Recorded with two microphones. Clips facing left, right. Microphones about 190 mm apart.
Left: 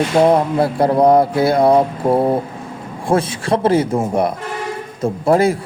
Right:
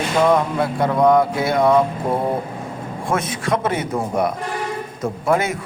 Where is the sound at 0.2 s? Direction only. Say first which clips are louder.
Left 3 dB; 35° left (ahead or behind).